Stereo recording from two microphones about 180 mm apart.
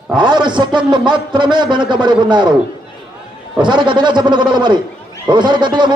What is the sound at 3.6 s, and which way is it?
A man's voice, 25° right (ahead or behind).